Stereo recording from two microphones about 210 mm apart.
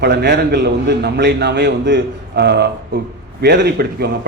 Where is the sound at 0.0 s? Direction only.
50° right (ahead or behind).